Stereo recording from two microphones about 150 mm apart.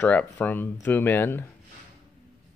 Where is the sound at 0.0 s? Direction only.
10° left (ahead or behind).